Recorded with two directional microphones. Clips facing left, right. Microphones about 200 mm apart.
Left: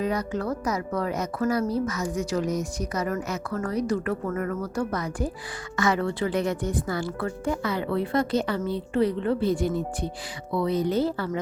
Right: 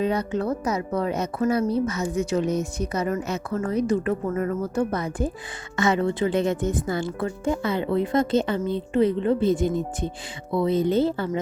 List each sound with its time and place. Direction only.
0.0 s a woman's voice: 25° right (ahead or behind)